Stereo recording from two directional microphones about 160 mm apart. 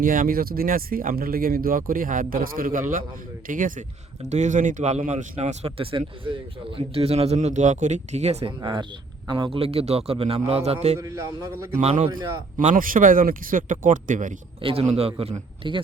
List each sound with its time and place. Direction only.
0.0 s speech: 60° right (ahead or behind); by 8.5 s 40° right (ahead or behind)
8.6 s a man's voice: 30° right (ahead or behind)
11.0 s a man's voice: 20° right (ahead or behind)
11.8 s a man's voice: 40° right (ahead or behind)
12.5 s speech: 60° right (ahead or behind)
14.6 s a man's voice: 35° right (ahead or behind)